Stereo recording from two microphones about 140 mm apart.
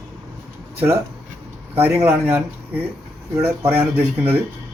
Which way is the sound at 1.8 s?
15° right (ahead or behind).